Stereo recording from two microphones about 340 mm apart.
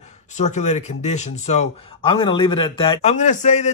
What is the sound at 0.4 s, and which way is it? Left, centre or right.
A man's voice, centre.